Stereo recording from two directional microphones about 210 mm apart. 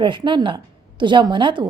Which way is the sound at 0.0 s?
20° right (ahead or behind).